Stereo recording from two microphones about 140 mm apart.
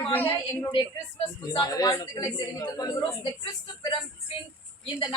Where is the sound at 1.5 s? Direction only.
25° left (ahead or behind).